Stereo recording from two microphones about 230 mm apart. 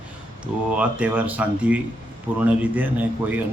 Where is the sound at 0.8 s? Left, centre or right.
Centre.